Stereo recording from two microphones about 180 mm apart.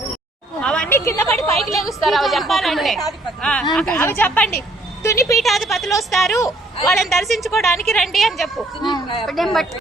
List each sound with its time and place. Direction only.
0.6 s a woman's voice: 5° left (ahead or behind)
1.9 s a woman's voice: centre (ahead or behind)
8.8 s speech: 25° left (ahead or behind)
9.2 s a woman's voice: centre (ahead or behind)